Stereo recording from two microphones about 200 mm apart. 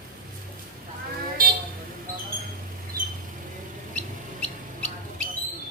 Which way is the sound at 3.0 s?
45° right (ahead or behind).